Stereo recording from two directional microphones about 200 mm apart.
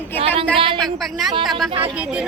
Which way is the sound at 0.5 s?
25° right (ahead or behind).